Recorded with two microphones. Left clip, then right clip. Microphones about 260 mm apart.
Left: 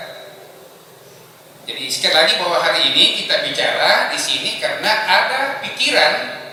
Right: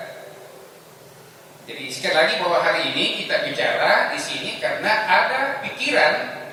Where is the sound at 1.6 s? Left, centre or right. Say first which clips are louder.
Left 6 dB; centre.